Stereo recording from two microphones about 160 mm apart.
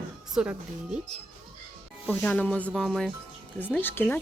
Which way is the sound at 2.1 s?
10° left (ahead or behind).